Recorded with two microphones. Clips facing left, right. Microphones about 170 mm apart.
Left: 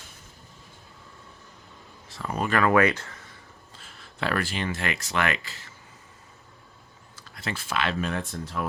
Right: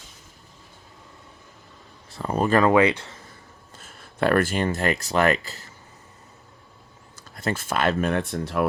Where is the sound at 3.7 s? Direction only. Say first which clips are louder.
Right 6 dB; 50° right (ahead or behind).